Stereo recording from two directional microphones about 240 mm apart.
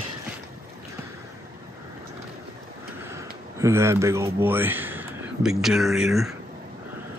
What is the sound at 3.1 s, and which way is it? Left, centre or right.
Speech, centre.